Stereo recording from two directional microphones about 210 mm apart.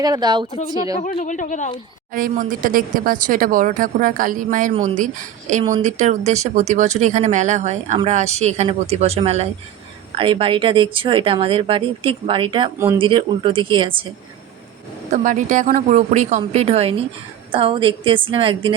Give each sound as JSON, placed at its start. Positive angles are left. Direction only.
{"t": 0.0, "sound": "speech", "side_deg": -20}
{"t": 1.2, "sound": "speech", "side_deg": 35}
{"t": 2.1, "sound": "speech", "side_deg": -40}
{"t": 15.1, "sound": "speech", "side_deg": -35}